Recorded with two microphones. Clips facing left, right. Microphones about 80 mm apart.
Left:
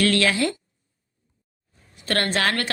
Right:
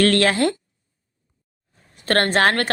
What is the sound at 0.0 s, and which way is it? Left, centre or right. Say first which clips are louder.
Speech: right 4 dB; right.